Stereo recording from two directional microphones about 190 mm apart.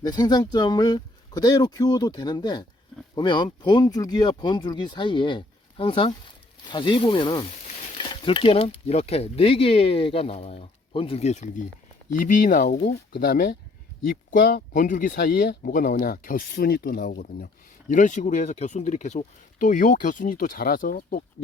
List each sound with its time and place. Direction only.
0.0 s speech: 20° left (ahead or behind); by 21.2 s 50° left (ahead or behind)